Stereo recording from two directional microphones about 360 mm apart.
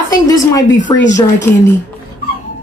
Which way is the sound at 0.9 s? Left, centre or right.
Centre.